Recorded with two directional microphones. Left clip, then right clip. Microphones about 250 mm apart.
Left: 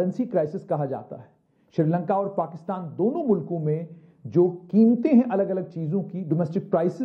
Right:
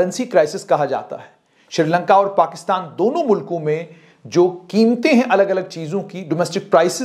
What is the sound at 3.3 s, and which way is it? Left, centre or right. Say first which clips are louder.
Speech: right 7 dB; centre.